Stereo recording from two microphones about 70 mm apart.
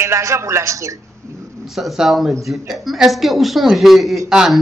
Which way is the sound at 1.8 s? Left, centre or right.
Centre.